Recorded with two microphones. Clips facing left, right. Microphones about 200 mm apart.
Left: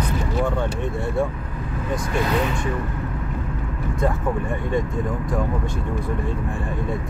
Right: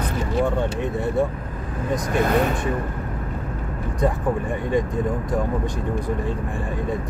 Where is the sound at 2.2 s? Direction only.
50° right (ahead or behind).